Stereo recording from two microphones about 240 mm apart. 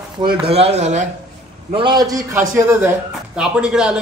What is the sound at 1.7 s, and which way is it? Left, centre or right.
A man's voice, centre.